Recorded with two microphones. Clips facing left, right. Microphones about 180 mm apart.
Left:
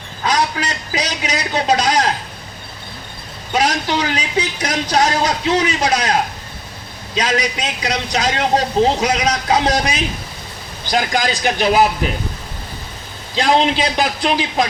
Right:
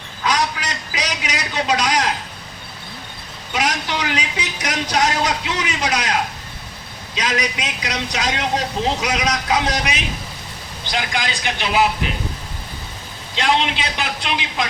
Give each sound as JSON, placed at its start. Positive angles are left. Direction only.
{"t": 0.2, "sound": "a sound", "side_deg": 30}
{"t": 3.5, "sound": "speech", "side_deg": 35}
{"t": 7.2, "sound": "a man's voice", "side_deg": 30}
{"t": 13.3, "sound": "a man's voice", "side_deg": 35}